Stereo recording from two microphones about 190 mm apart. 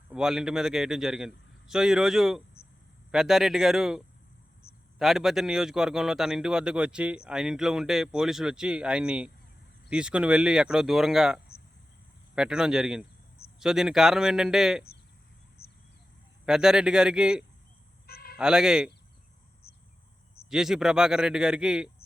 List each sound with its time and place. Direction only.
0.1 s a man's voice: 5° right (ahead or behind)
16.5 s a man's voice: 5° right (ahead or behind)
18.0 s fowl: 55° left (ahead or behind)
18.3 s a man's voice: 5° right (ahead or behind)
19.6 s a sound: 55° left (ahead or behind)
20.5 s a man's voice: 5° right (ahead or behind)